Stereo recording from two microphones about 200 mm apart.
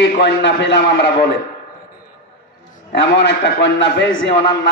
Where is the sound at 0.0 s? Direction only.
60° left (ahead or behind).